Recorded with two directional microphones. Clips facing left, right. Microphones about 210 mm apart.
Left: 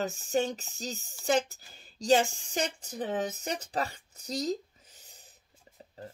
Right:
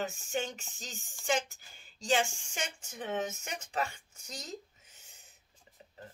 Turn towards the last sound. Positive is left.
turn(degrees=35)  # may be behind; listen again after turning